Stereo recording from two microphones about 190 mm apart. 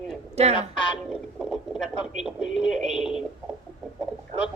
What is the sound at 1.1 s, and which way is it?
Speech, centre (ahead or behind).